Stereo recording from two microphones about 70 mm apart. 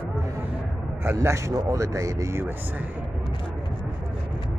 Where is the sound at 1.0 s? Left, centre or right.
Right.